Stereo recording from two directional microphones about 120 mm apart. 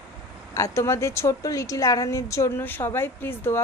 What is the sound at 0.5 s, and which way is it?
Speech, 25° left (ahead or behind).